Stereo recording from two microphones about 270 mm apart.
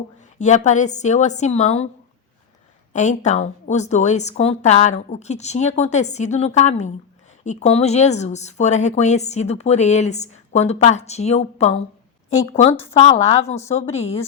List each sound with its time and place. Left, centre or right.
0.3 s speech: left
2.9 s speech: left
12.9 s speech: left